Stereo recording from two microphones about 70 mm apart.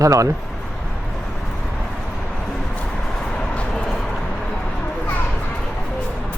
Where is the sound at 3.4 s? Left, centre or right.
Centre.